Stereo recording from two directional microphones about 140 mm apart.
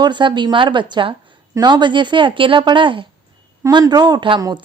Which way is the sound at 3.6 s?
25° right (ahead or behind).